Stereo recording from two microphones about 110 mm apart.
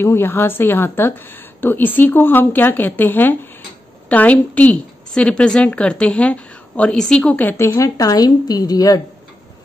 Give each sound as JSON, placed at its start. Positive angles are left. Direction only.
{"t": 0.0, "sound": "a woman's voice", "side_deg": 20}